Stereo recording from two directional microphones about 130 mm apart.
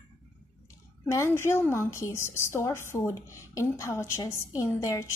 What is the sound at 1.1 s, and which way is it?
A woman's voice, 20° left (ahead or behind).